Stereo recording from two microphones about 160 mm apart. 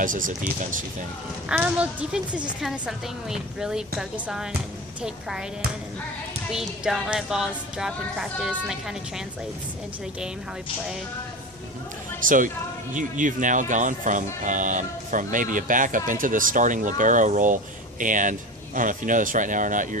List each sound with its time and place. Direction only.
0.0 s speech: 55° right (ahead or behind)
1.5 s a woman's voice: 10° right (ahead or behind)
2.6 s music: 5° right (ahead or behind)
6.5 s music: 5° right (ahead or behind)
12.2 s speech: 55° right (ahead or behind)